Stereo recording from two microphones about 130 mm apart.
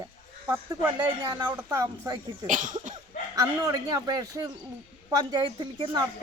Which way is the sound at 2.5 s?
75° right (ahead or behind).